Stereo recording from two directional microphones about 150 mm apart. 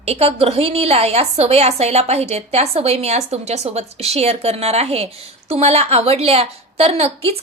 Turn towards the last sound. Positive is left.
turn(degrees=-40)  # may be behind; listen again after turning